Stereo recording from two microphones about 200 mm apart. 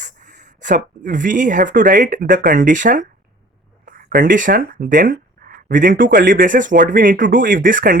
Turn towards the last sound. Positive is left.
turn(degrees=-40)  # may be behind; listen again after turning